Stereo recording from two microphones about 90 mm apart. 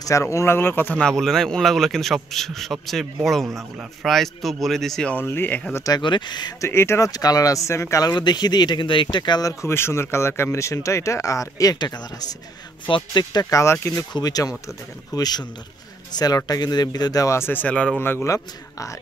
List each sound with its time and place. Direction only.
0.0 s speech: 35° left (ahead or behind)
1.0 s a man's voice: 5° left (ahead or behind)
5.1 s speech: 20° left (ahead or behind)
6.0 s speech: 60° left (ahead or behind)
6.6 s speech: 30° left (ahead or behind)
7.1 s speech: 45° left (ahead or behind)
8.0 s speech: 50° left (ahead or behind)
9.5 s speech: 30° left (ahead or behind)
12.8 s speech: 60° left (ahead or behind); by 14.0 s 30° left (ahead or behind)
14.1 s speech: 45° left (ahead or behind)
17.4 s speech: 20° left (ahead or behind)